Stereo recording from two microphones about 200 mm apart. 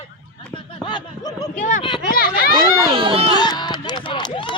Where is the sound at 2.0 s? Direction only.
45° left (ahead or behind).